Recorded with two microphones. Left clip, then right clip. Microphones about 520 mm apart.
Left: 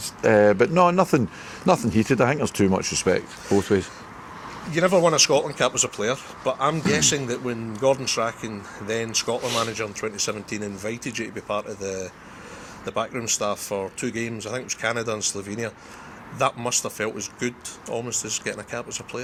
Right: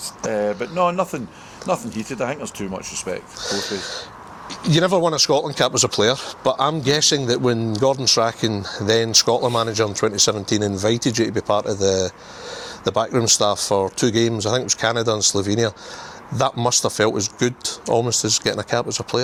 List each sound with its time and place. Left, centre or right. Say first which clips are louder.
0.3 s speech: left 6 dB; left
4.7 s speech: right 1 dB; right